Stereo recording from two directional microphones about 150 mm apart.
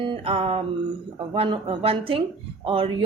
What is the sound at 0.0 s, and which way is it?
A woman's voice, 40° right (ahead or behind).